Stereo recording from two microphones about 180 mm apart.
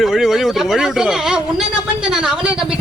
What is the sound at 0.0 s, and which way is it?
A woman's voice, centre (ahead or behind).